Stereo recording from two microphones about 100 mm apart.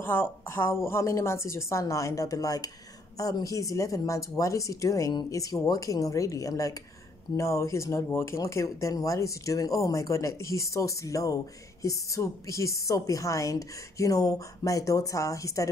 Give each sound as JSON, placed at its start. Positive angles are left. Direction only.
{"t": 0.0, "sound": "a woman's voice", "side_deg": 20}